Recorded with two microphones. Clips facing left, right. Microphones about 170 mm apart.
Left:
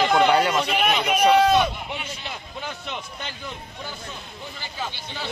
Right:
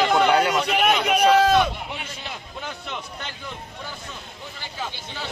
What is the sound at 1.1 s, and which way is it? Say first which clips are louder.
Speech: left 1 dB; 10° left (ahead or behind).